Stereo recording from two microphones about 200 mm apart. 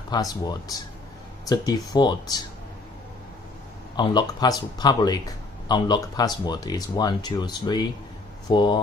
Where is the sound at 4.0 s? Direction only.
20° left (ahead or behind).